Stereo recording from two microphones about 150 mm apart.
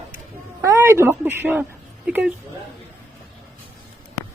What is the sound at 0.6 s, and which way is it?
A man's voice, 20° right (ahead or behind).